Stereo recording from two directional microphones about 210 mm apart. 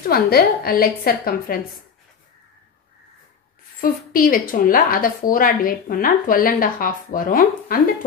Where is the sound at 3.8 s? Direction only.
45° left (ahead or behind).